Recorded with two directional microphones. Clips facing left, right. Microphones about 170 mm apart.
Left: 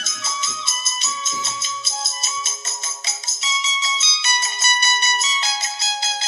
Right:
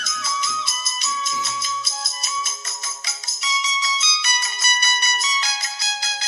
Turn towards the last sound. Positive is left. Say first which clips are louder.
# left 4 dB
turn(degrees=25)  # may be behind; listen again after turning